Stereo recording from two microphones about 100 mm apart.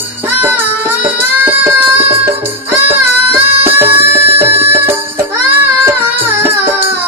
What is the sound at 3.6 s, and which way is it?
Music, 20° right (ahead or behind).